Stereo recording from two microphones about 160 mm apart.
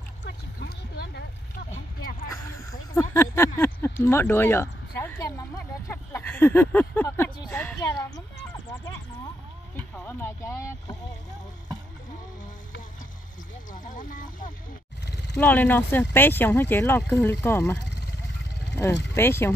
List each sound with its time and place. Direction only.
0.2 s a sound: 90° left
2.0 s a sound: 65° left (ahead or behind)
3.0 s a sound: 15° left (ahead or behind)
7.4 s a woman's voice: 5° left (ahead or behind)
7.8 s speech: 20° left (ahead or behind)
9.8 s speech: 10° left (ahead or behind)
13.7 s speech: 55° left (ahead or behind)
15.3 s speech: 10° left (ahead or behind)
19.1 s speech: 15° left (ahead or behind)